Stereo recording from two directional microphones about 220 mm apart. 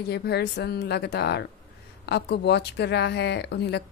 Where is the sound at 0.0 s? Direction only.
50° left (ahead or behind).